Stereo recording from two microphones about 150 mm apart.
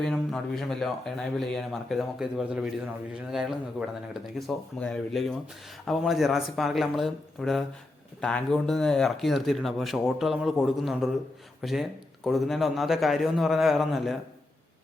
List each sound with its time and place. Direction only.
0.0 s speech: 5° left (ahead or behind)